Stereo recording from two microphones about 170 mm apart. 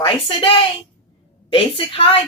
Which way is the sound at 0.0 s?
30° left (ahead or behind).